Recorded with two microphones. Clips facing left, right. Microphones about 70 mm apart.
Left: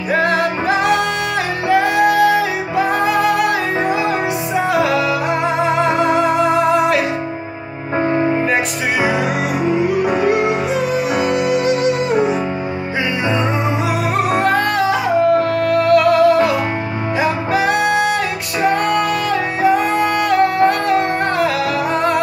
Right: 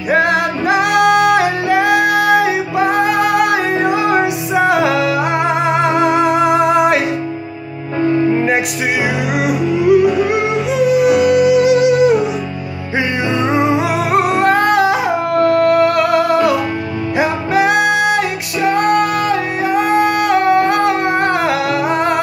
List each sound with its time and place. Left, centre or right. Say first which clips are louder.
0.3 s music: right 2 dB; left
0.9 s music: right 8 dB; right
1.4 s music: right 2 dB; centre
3.7 s music: right 2 dB; left
4.6 s music: right 2 dB; right
8.0 s music: right 3 dB; left
9.6 s music: right 6 dB; left
14.5 s music: right 4 dB; centre